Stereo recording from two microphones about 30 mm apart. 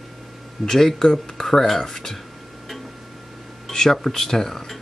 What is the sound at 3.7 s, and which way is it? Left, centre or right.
Speech, centre.